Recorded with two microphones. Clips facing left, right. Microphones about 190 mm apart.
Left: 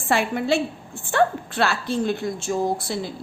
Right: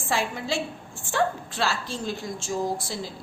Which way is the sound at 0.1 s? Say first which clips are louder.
Left 6 dB; 60° left (ahead or behind).